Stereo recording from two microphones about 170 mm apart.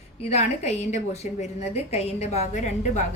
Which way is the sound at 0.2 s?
40° left (ahead or behind).